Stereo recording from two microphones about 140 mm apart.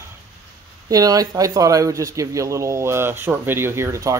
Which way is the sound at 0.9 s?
25° right (ahead or behind).